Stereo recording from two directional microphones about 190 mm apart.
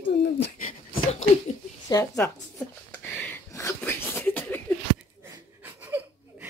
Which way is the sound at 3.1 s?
10° left (ahead or behind).